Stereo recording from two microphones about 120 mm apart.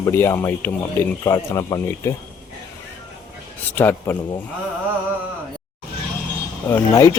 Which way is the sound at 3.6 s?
15° left (ahead or behind).